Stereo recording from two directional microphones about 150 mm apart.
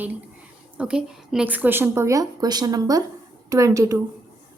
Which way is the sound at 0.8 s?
5° right (ahead or behind).